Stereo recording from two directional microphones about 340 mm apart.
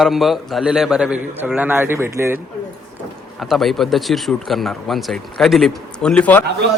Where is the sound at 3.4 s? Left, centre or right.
Centre.